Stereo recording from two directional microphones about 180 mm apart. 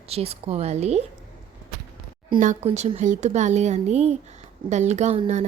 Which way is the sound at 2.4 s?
40° right (ahead or behind).